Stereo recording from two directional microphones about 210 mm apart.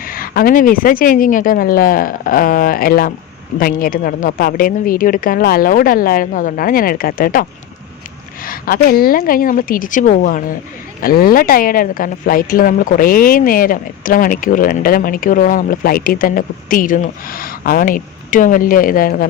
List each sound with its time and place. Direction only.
0.0 s a woman's voice: 45° left (ahead or behind)
8.4 s a woman's voice: 45° left (ahead or behind)